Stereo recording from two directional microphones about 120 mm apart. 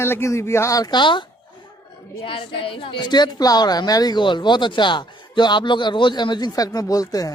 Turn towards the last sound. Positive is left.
turn(degrees=30)  # may be behind; listen again after turning